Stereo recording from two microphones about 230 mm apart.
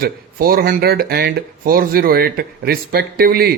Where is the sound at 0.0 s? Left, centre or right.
Right.